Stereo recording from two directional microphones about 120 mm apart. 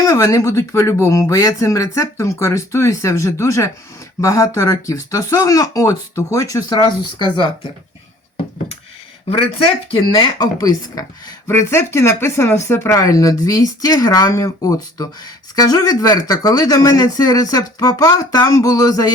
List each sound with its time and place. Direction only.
0.0 s speech: 30° left (ahead or behind)
9.3 s speech: 45° left (ahead or behind); by 19.1 s 30° left (ahead or behind)